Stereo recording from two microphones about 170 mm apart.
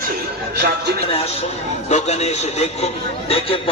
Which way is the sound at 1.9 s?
40° left (ahead or behind).